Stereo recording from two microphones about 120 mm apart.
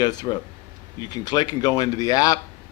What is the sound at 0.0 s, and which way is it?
Speech, 35° left (ahead or behind).